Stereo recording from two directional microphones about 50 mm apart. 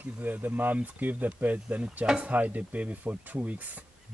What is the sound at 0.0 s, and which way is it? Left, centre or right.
Speech, right.